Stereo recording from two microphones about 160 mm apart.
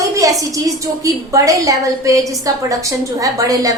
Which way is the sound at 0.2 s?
20° right (ahead or behind).